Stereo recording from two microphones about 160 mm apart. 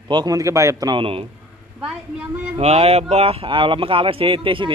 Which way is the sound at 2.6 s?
40° right (ahead or behind).